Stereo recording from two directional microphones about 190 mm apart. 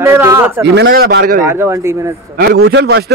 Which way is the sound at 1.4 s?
15° right (ahead or behind).